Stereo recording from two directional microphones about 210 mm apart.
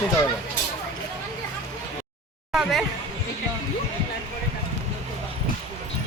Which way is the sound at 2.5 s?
Centre (ahead or behind).